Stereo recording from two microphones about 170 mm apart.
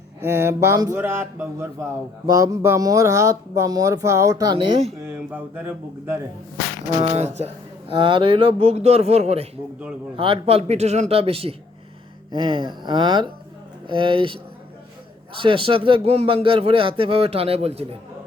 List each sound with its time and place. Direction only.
0.3 s speech: 15° right (ahead or behind)
4.5 s speech: 30° right (ahead or behind)
5.0 s speech: 10° right (ahead or behind)
6.9 s speech: 35° right (ahead or behind)
15.4 s speech: 30° right (ahead or behind)